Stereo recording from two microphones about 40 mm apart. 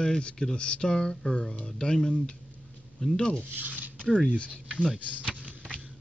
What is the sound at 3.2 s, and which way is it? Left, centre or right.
Speech, left.